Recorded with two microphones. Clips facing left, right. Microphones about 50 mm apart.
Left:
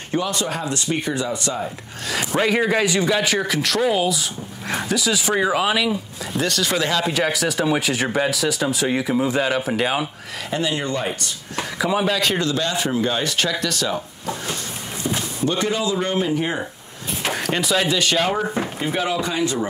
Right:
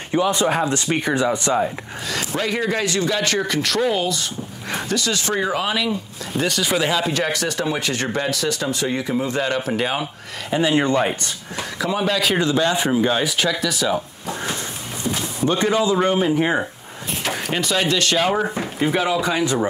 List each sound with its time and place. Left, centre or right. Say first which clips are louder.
0.1 s speech: right 5 dB; right
2.3 s speech: left 4 dB; centre
6.4 s speech: right 1 dB; centre
7.1 s speech: left 1 dB; centre
10.5 s speech: right 5 dB; right
11.8 s a man's voice: left 1 dB; centre
12.4 s speech: right 3 dB; centre
15.4 s speech: right 4 dB; right
17.3 s speech: left 1 dB; centre
19.2 s speech: right 3 dB; right